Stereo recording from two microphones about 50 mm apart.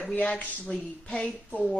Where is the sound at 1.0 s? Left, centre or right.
Centre.